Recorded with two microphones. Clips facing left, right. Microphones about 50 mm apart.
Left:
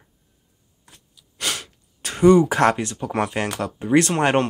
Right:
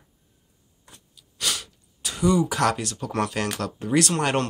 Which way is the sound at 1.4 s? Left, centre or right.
Left.